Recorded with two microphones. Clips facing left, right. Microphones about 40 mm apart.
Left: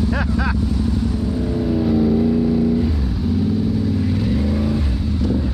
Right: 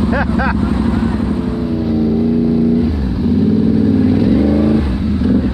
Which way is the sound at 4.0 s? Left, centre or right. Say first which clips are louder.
Right 9 dB; centre.